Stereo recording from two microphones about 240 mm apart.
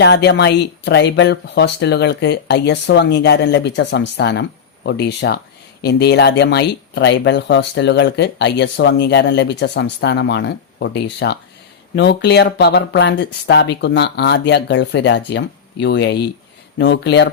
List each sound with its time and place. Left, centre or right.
0.0 s speech: left